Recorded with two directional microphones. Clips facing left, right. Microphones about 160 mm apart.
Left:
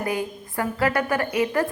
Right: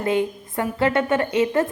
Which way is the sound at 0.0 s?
25° right (ahead or behind).